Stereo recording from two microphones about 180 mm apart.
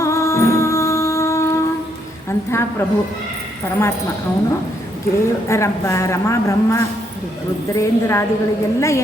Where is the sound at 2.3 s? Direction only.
15° left (ahead or behind).